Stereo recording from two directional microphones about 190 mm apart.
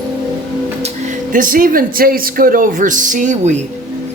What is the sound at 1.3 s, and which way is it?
Speech, 45° right (ahead or behind).